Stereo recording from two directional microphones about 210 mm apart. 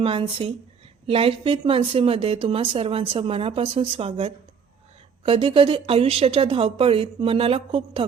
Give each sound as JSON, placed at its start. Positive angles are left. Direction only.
{"t": 0.0, "sound": "a woman's voice", "side_deg": -25}